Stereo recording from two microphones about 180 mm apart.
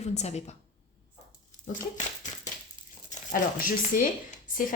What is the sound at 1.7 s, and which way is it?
Speech, 45° left (ahead or behind).